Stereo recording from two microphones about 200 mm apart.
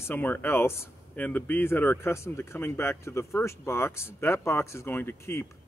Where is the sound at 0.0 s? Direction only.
10° left (ahead or behind).